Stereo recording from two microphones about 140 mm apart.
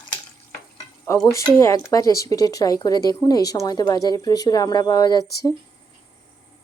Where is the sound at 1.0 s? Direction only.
20° left (ahead or behind).